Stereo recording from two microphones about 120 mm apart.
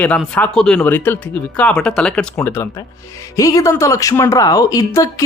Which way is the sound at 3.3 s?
30° left (ahead or behind).